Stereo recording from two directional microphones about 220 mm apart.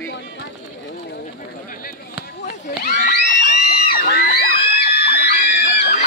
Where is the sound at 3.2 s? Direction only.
50° left (ahead or behind).